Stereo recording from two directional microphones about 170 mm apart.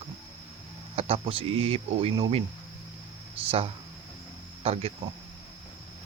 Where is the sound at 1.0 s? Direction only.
35° right (ahead or behind).